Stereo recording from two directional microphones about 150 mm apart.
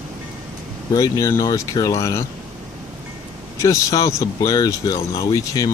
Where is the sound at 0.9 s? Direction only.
20° left (ahead or behind).